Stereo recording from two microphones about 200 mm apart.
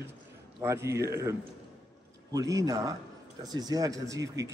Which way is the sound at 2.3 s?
15° right (ahead or behind).